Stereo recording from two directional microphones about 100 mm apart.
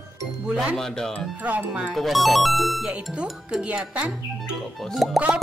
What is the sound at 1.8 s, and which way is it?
A woman's voice, centre (ahead or behind).